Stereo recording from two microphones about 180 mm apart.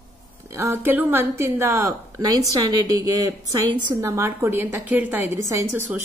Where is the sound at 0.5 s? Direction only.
15° right (ahead or behind).